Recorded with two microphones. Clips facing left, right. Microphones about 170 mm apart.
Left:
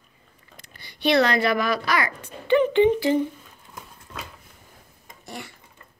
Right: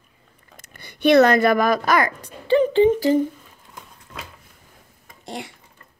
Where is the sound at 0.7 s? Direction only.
50° right (ahead or behind).